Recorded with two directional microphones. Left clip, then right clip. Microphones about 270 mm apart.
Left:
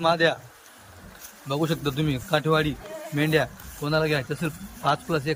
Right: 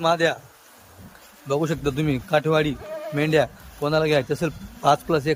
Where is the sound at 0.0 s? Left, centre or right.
Centre.